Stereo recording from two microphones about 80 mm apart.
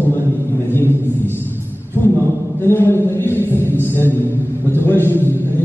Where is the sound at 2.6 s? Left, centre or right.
Left.